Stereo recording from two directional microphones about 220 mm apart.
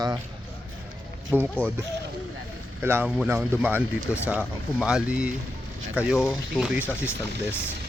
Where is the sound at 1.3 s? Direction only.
5° right (ahead or behind).